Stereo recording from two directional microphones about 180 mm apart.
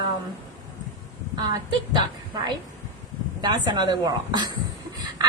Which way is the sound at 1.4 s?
25° right (ahead or behind).